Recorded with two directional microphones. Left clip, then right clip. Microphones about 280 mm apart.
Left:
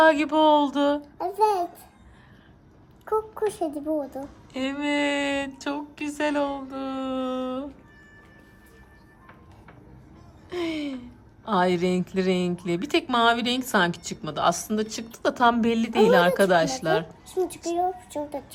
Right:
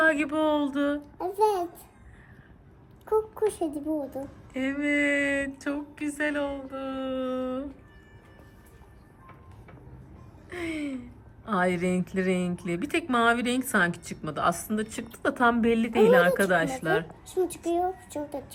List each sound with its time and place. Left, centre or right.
0.0 s a woman's voice: centre
3.1 s a woman's voice: centre
10.5 s a woman's voice: centre